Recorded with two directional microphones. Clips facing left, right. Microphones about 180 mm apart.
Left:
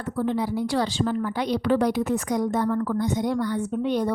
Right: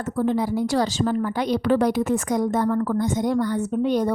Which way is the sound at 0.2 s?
45° right (ahead or behind).